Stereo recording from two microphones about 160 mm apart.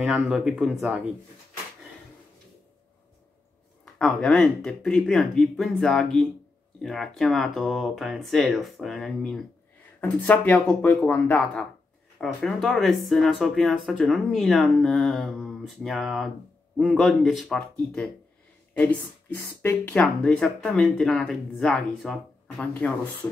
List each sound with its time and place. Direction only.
0.0 s speech: 5° right (ahead or behind)
3.8 s speech: centre (ahead or behind)